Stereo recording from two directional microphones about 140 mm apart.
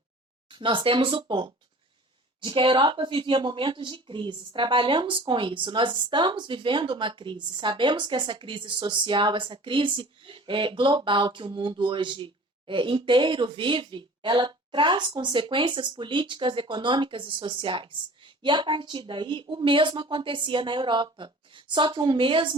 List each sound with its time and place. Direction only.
0.5 s speech: 35° right (ahead or behind)